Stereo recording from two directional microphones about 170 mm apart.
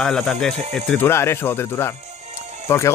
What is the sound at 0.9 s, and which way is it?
Speech, 15° left (ahead or behind).